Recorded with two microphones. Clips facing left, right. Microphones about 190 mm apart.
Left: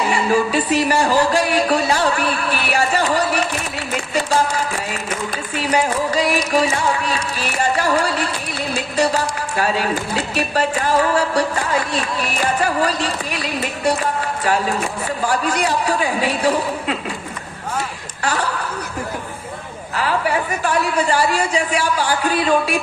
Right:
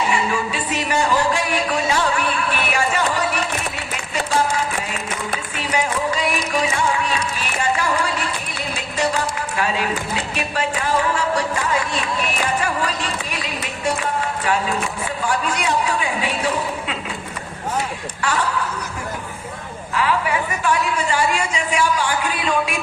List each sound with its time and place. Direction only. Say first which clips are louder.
0.1 s a sound: left 5 dB; 35° left (ahead or behind)
5.7 s music: left 3 dB; 35° left (ahead or behind)
9.0 s a woman's voice: left 2 dB; 40° left (ahead or behind)
12.6 s music: left 4 dB; 35° left (ahead or behind)
15.3 s a woman's voice: left 2 dB; 40° left (ahead or behind)
20.0 s a woman's voice: left 1 dB; 40° left (ahead or behind)